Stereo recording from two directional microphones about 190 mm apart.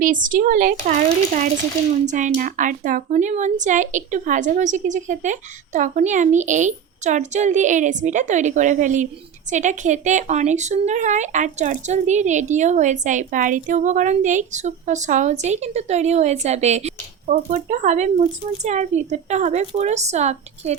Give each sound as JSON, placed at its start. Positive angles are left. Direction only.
{"t": 0.0, "sound": "a woman's voice", "side_deg": -45}